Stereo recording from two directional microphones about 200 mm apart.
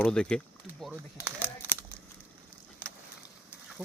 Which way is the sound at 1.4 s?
10° left (ahead or behind).